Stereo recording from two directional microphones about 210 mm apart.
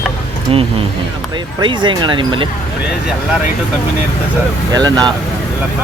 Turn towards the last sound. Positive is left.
turn(degrees=-20)  # may be behind; listen again after turning